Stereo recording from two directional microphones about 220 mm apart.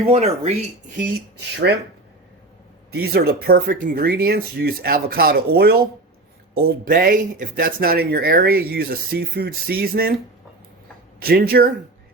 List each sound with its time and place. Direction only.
0.0 s speech: 30° right (ahead or behind)
1.7 s speech: 50° right (ahead or behind)
2.9 s speech: 45° right (ahead or behind)
11.2 s speech: 45° right (ahead or behind)